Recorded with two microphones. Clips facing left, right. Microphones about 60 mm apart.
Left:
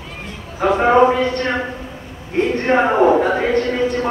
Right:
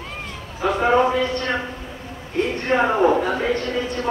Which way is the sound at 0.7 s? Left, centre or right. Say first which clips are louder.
Left 3 dB; left.